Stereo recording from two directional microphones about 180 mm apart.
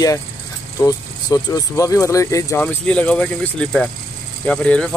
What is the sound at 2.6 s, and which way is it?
Speech, 5° left (ahead or behind).